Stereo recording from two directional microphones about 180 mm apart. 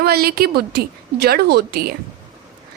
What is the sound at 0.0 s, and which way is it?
A woman's voice, 60° right (ahead or behind).